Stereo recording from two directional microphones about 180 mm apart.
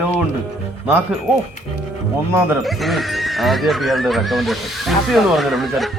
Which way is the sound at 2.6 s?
Centre (ahead or behind).